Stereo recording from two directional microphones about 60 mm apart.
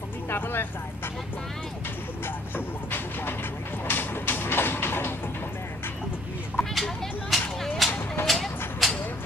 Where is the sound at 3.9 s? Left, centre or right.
Left.